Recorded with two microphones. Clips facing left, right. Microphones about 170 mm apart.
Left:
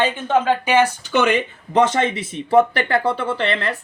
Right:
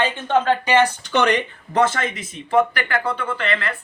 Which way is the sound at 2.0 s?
30° left (ahead or behind).